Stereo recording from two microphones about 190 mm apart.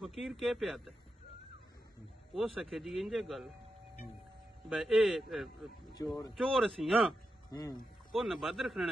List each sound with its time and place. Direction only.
0.0 s a man's voice: centre (ahead or behind)
2.3 s a man's voice: centre (ahead or behind)
4.6 s a man's voice: centre (ahead or behind)
6.0 s speech: 20° left (ahead or behind)
6.3 s a man's voice: centre (ahead or behind)
7.4 s speech: 20° left (ahead or behind)
8.1 s a man's voice: centre (ahead or behind)